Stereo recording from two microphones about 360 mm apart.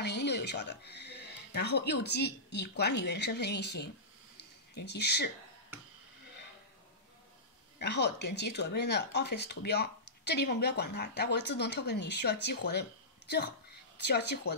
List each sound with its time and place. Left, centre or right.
0.0 s speech: left
4.4 s a sound: left
7.8 s speech: left
13.9 s speech: left